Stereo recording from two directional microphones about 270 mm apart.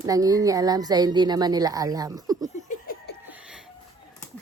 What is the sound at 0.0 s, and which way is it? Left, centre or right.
Speech, centre.